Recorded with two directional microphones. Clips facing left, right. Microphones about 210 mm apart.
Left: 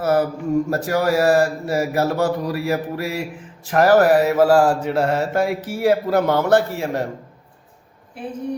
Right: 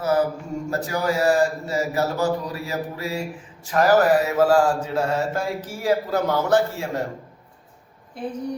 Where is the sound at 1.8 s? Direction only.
60° left (ahead or behind).